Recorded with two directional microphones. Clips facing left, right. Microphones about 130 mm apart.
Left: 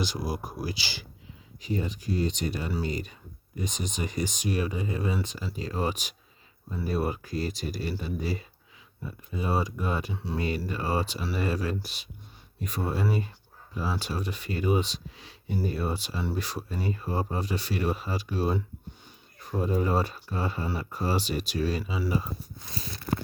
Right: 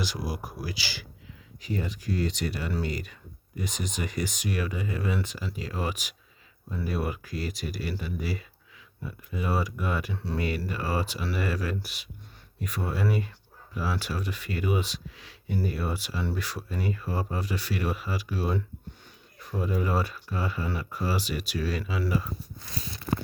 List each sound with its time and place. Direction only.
0.0 s speech: 25° left (ahead or behind)